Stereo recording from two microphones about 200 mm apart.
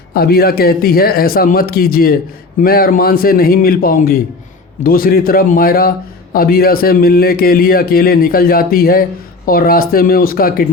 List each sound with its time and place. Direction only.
0.1 s a man's voice: 50° left (ahead or behind)